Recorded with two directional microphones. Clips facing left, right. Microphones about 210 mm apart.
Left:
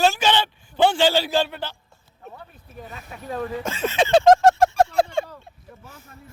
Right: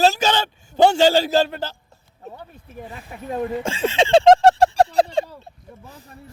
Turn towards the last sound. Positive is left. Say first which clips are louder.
# right 3 dB
turn(degrees=-35)  # may be behind; listen again after turning